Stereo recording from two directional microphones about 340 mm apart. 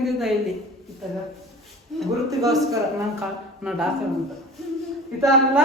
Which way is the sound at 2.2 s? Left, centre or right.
Centre.